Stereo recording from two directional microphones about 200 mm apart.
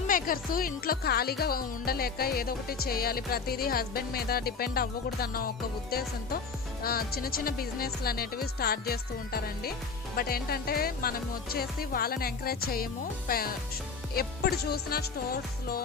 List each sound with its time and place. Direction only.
0.1 s speech: 45° left (ahead or behind)